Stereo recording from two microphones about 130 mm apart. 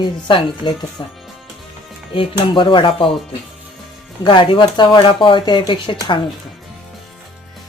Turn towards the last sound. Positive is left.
turn(degrees=40)  # may be behind; listen again after turning